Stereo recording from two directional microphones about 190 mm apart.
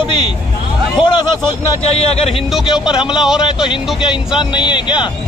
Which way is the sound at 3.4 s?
25° left (ahead or behind).